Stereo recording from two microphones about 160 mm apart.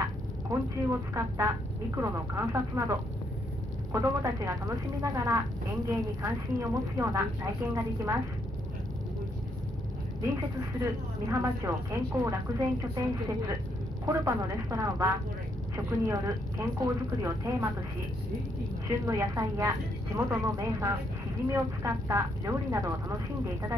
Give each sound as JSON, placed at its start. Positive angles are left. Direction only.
{"t": 0.5, "sound": "a woman's voice", "side_deg": -20}
{"t": 10.8, "sound": "speech", "side_deg": -20}
{"t": 14.0, "sound": "a woman's voice", "side_deg": -20}
{"t": 18.9, "sound": "a woman's voice", "side_deg": -20}